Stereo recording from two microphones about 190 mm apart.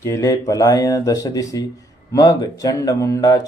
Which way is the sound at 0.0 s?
15° left (ahead or behind).